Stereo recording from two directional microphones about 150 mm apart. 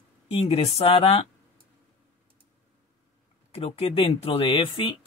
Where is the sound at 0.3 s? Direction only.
40° left (ahead or behind).